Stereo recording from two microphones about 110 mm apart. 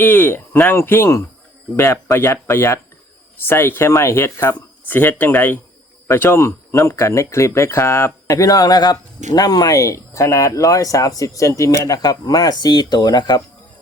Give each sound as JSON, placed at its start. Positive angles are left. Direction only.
{"t": 0.0, "sound": "speech", "side_deg": 20}